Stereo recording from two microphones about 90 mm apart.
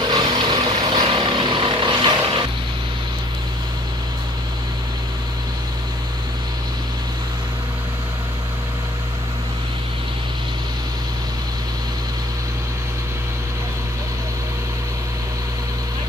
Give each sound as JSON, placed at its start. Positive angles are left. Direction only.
{"t": 0.1, "sound": "vehicle", "side_deg": -60}